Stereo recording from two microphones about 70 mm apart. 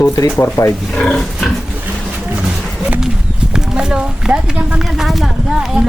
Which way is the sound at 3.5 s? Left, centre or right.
Centre.